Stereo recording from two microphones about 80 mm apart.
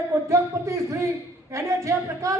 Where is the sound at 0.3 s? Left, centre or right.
Right.